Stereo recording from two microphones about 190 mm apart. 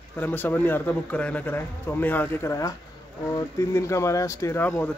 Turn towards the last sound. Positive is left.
turn(degrees=10)  # may be behind; listen again after turning